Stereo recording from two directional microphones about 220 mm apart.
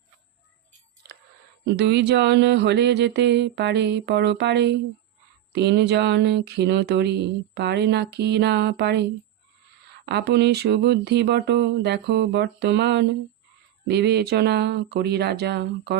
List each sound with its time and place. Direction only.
1.6 s speech: 50° right (ahead or behind)
10.1 s speech: 50° right (ahead or behind)